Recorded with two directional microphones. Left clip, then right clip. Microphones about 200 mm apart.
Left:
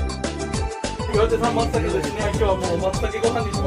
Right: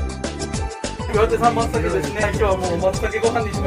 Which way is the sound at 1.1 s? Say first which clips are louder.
Right 3 dB; centre (ahead or behind).